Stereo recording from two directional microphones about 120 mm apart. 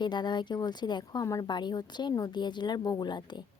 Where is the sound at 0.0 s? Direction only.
40° left (ahead or behind).